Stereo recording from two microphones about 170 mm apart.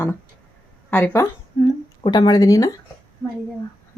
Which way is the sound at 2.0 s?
25° left (ahead or behind).